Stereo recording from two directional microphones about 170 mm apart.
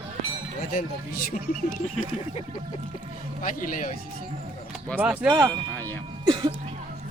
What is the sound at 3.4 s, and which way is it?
Speech, 50° left (ahead or behind).